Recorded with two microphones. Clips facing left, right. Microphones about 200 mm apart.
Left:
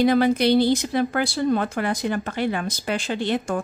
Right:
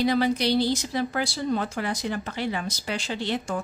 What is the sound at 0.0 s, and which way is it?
A woman's voice, 55° left (ahead or behind).